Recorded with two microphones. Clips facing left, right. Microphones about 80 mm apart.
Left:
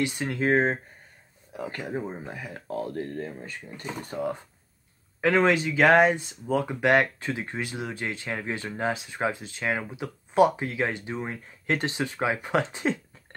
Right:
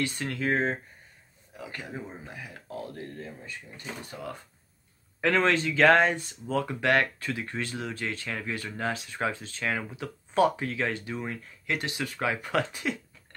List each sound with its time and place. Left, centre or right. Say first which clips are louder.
0.0 s speech: left 3 dB; centre
0.4 s speech: left 5 dB; left
5.2 s speech: left 3 dB; centre